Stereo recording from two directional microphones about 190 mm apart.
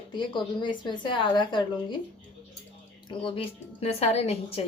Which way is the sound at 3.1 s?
25° left (ahead or behind).